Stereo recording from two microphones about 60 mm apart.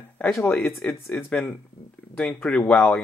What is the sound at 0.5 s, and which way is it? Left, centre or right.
Speech, centre.